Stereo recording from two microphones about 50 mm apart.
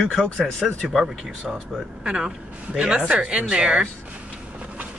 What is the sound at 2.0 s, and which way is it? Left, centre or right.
Speech, centre.